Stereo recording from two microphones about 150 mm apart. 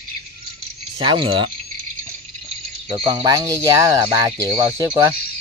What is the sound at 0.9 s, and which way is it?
Speech, 35° right (ahead or behind).